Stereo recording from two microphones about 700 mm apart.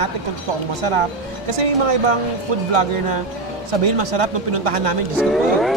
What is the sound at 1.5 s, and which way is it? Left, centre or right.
Speech, right.